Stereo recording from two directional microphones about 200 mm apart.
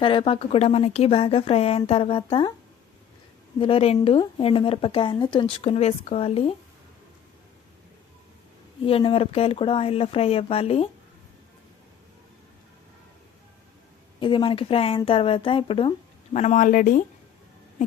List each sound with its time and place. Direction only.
0.0 s a woman's voice: 25° left (ahead or behind)
3.6 s a woman's voice: 30° left (ahead or behind)
8.8 s a woman's voice: 25° left (ahead or behind)
14.2 s a woman's voice: 25° left (ahead or behind); by 17.0 s 40° left (ahead or behind)